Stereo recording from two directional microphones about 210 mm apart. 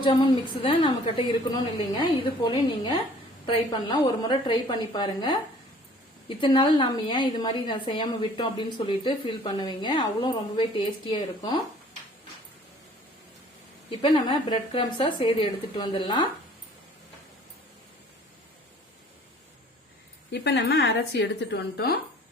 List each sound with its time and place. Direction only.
0.0 s a woman's voice: 20° left (ahead or behind)
14.0 s a woman's voice: 25° left (ahead or behind)
20.3 s speech: 55° left (ahead or behind)